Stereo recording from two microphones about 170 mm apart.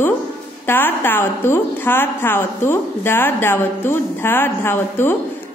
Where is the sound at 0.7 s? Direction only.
15° left (ahead or behind).